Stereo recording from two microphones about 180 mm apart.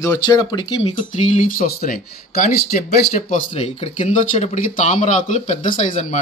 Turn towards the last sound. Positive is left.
turn(degrees=45)  # may be behind; listen again after turning